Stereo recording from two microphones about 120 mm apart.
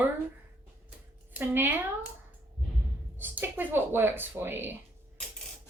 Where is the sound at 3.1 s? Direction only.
15° right (ahead or behind).